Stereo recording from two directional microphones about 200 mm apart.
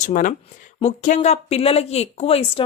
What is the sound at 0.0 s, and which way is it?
Speech, 40° left (ahead or behind).